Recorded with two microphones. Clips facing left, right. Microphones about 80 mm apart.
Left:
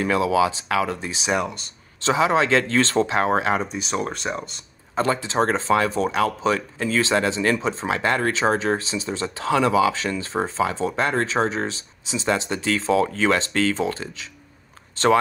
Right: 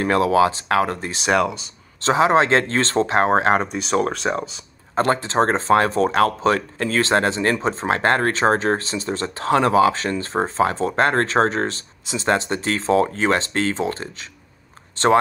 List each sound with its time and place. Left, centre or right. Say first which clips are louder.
0.0 s speech: right 3 dB; right
2.0 s speech: right 3 dB; right
3.5 s speech: right 4 dB; right
3.9 s speech: right 7 dB; right
4.9 s speech: right 3 dB; right